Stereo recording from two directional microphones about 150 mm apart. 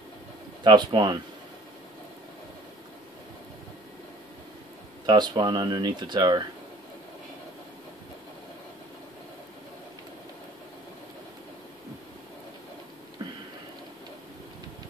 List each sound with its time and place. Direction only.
0.7 s speech: 30° right (ahead or behind)
5.0 s speech: 30° right (ahead or behind)
13.2 s a sound: 25° right (ahead or behind)